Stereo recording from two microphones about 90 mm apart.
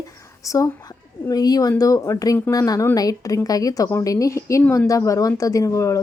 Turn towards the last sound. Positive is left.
turn(degrees=35)  # may be behind; listen again after turning